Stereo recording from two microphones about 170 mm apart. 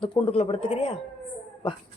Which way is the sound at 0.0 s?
35° left (ahead or behind).